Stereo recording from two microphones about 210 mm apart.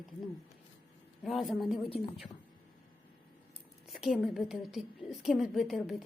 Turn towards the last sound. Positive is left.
turn(degrees=0)  # may be behind; listen again after turning